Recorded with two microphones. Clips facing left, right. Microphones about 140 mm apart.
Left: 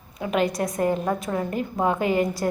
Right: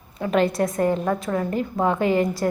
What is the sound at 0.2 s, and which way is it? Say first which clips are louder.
A woman's voice: right 3 dB; 15° left (ahead or behind).